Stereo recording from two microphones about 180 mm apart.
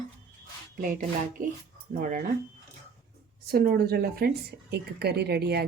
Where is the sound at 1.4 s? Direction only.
45° right (ahead or behind).